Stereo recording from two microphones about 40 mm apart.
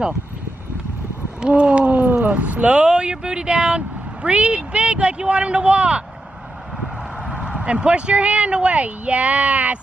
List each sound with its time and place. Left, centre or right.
1.6 s speech: right
1.9 s speech: right
2.7 s speech: right
7.5 s speech: right